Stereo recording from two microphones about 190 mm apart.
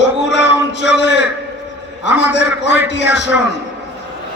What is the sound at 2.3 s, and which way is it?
Speech, 65° left (ahead or behind).